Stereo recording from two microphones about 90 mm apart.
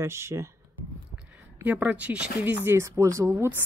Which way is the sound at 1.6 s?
20° right (ahead or behind).